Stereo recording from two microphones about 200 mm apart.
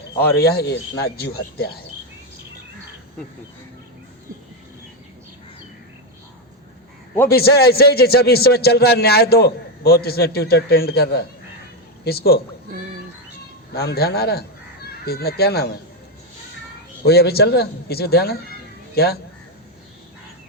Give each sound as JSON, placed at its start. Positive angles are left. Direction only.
{"t": 0.3, "sound": "a man's voice", "side_deg": 50}
{"t": 7.3, "sound": "a man's voice", "side_deg": 50}
{"t": 13.7, "sound": "a man's voice", "side_deg": 50}
{"t": 17.0, "sound": "a man's voice", "side_deg": 50}